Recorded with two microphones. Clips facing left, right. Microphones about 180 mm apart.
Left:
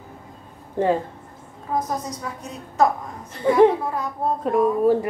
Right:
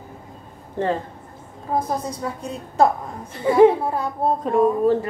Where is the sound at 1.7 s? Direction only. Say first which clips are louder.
Right 2 dB; 30° right (ahead or behind).